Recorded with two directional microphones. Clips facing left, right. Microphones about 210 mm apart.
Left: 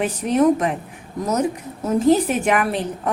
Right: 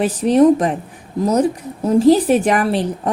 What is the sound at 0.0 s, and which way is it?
Speech, 35° right (ahead or behind).